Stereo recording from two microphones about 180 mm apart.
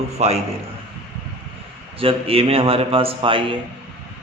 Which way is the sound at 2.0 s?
30° right (ahead or behind).